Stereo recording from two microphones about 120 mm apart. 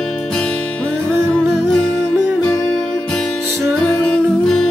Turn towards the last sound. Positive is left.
turn(degrees=5)  # may be behind; listen again after turning